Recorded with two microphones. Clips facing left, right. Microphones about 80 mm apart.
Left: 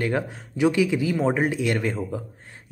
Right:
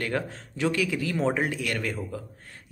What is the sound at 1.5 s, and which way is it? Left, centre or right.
Speech, left.